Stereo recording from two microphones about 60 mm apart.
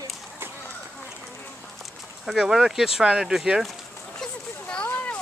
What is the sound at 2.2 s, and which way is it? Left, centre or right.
Speech, centre.